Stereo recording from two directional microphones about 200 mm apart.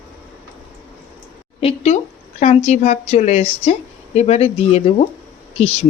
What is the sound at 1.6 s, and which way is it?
A woman's voice, 35° left (ahead or behind).